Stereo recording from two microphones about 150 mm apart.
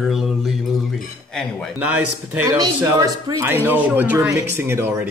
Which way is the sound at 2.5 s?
25° right (ahead or behind).